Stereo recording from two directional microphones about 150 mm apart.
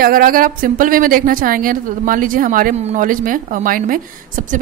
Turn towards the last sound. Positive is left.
turn(degrees=-60)  # may be behind; listen again after turning